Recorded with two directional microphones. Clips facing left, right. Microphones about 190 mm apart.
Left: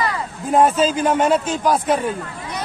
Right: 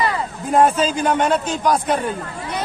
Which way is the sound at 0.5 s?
Centre (ahead or behind).